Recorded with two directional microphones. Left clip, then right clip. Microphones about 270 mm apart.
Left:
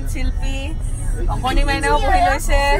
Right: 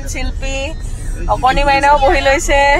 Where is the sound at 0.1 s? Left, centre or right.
Centre.